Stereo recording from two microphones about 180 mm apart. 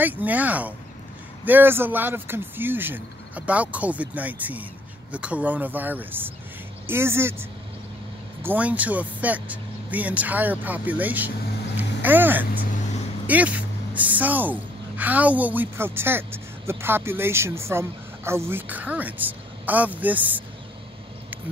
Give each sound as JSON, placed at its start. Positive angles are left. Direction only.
{"t": 0.0, "sound": "speech", "side_deg": -10}